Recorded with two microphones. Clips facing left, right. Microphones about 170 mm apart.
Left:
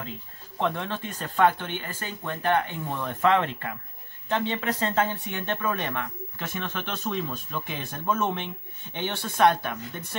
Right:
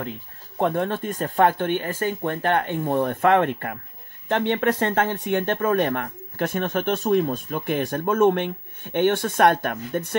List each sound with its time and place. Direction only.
0.6 s speech: 50° right (ahead or behind)